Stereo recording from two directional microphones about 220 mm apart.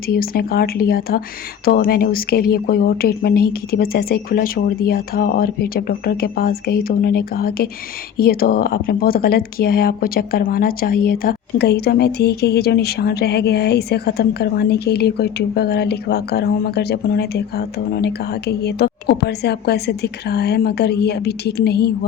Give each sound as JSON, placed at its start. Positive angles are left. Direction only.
{"t": 0.1, "sound": "speech", "side_deg": 45}